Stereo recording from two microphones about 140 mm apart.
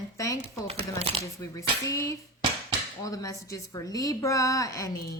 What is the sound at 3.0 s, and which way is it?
A woman's voice, 25° left (ahead or behind).